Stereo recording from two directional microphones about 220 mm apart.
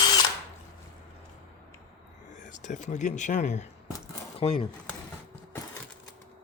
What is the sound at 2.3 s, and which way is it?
Speech, 35° left (ahead or behind).